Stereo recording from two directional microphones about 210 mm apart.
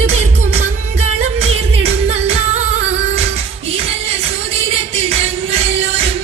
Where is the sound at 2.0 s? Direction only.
30° right (ahead or behind).